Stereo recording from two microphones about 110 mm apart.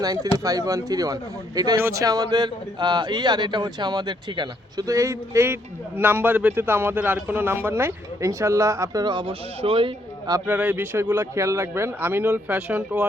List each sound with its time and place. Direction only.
0.0 s speech: 35° right (ahead or behind)
4.9 s a man's voice: 30° right (ahead or behind); by 9.3 s 45° right (ahead or behind)
9.6 s speech: 55° right (ahead or behind)
10.4 s a man's voice: 15° right (ahead or behind)